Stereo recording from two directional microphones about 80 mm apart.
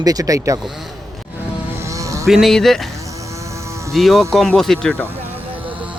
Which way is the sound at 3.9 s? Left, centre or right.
Centre.